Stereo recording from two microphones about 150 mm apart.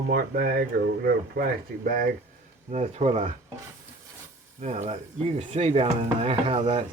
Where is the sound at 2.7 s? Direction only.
50° right (ahead or behind).